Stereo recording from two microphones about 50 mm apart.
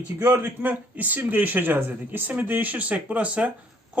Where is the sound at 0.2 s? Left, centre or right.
Right.